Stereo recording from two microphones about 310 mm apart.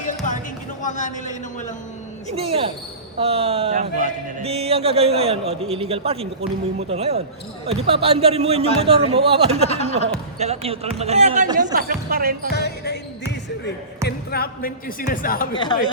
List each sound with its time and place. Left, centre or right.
0.8 s speech: left
2.3 s speech: centre
9.6 s speech: centre
10.3 s speech: right
12.5 s basketball bounce: left
14.0 s speech: left
15.5 s speech: centre